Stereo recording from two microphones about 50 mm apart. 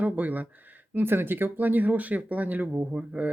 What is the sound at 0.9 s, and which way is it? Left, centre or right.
Speech, right.